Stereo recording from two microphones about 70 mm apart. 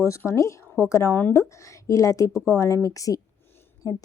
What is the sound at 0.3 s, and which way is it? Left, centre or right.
A woman's voice, left.